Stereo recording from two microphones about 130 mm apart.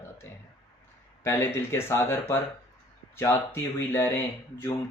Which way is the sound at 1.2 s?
20° left (ahead or behind).